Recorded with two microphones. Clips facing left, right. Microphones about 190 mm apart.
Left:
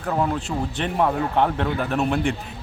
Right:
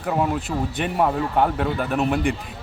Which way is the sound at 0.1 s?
5° right (ahead or behind).